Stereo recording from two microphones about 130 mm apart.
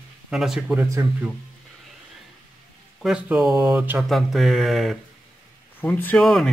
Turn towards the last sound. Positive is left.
turn(degrees=5)  # may be behind; listen again after turning